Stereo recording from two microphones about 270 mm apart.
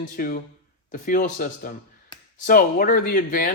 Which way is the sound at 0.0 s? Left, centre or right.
Left.